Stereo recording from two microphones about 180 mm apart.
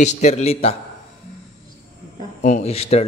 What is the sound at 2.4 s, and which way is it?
Speech, 40° left (ahead or behind).